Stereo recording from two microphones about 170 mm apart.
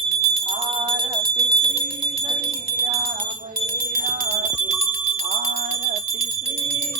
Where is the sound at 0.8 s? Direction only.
30° right (ahead or behind).